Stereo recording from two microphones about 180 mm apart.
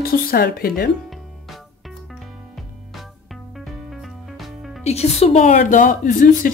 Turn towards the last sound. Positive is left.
turn(degrees=50)  # may be behind; listen again after turning